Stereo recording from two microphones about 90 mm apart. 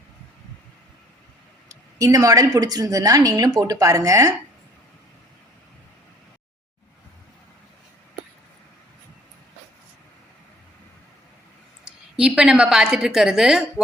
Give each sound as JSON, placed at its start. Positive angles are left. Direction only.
{"t": 1.7, "sound": "a woman's voice", "side_deg": -35}
{"t": 12.2, "sound": "a woman's voice", "side_deg": -10}